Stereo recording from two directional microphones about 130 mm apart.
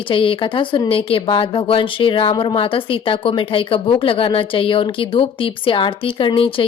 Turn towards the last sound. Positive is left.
turn(degrees=40)  # may be behind; listen again after turning